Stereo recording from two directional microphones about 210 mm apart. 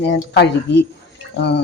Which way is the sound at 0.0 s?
55° left (ahead or behind).